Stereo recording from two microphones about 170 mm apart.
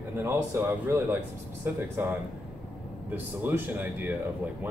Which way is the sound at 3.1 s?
10° right (ahead or behind).